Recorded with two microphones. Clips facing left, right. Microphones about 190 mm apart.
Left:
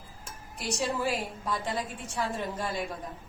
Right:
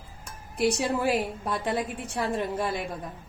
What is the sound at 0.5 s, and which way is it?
A woman's voice, 60° right (ahead or behind).